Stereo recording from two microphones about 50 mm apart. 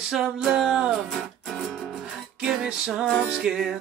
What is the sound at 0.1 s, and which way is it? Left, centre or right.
Music, centre.